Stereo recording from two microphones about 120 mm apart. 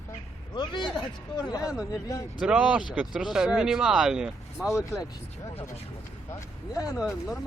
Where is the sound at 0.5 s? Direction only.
40° left (ahead or behind).